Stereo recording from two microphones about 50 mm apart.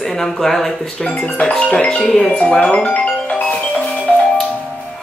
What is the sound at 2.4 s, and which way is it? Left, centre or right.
Music, left.